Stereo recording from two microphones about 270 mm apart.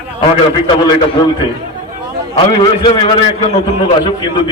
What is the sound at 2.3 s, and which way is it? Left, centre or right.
A man's voice, centre.